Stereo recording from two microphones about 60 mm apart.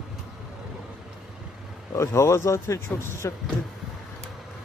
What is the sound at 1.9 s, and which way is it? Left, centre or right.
Speech, left.